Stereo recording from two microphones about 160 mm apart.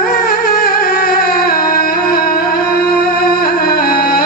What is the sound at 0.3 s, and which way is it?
Music, 75° left (ahead or behind).